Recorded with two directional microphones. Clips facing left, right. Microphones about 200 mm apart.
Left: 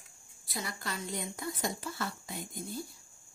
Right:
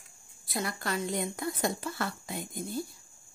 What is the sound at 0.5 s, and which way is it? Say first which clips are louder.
A woman's voice: right 6 dB; 55° right (ahead or behind).